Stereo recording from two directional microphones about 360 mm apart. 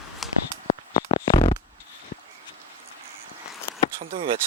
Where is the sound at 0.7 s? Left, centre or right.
Centre.